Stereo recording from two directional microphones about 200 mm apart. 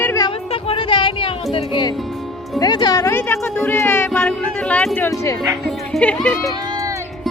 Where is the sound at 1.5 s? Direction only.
25° left (ahead or behind); by 6.5 s 5° left (ahead or behind).